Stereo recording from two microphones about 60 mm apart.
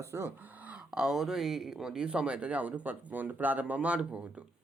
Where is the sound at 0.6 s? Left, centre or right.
Right.